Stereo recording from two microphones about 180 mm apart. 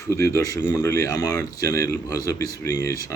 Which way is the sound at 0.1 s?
15° left (ahead or behind).